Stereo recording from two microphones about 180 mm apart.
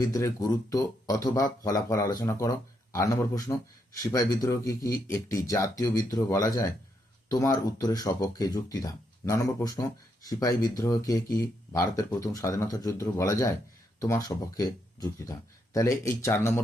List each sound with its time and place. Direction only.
0.0 s speech: 20° left (ahead or behind)